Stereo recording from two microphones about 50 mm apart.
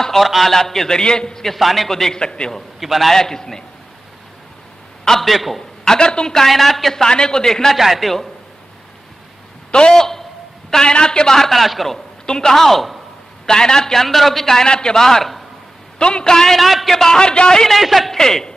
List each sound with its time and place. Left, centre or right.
0.0 s a man's voice: centre
2.1 s a man's voice: centre
2.8 s a man's voice: centre
5.0 s a man's voice: centre
5.9 s a man's voice: centre
7.7 s a man's voice: centre
9.7 s a man's voice: centre
16.0 s a man's voice: centre
16.5 s a man's voice: centre
17.7 s a man's voice: centre
18.2 s a man's voice: centre